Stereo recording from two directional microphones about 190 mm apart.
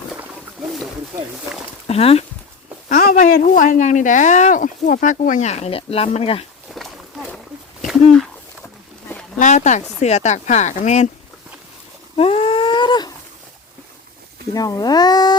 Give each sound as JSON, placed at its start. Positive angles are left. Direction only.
{"t": 1.9, "sound": "speech", "side_deg": 30}
{"t": 2.9, "sound": "speech", "side_deg": 45}
{"t": 6.7, "sound": "a sound", "side_deg": 0}
{"t": 9.4, "sound": "speech", "side_deg": 40}
{"t": 12.1, "sound": "a sound", "side_deg": 30}
{"t": 14.5, "sound": "a child's voice", "side_deg": 20}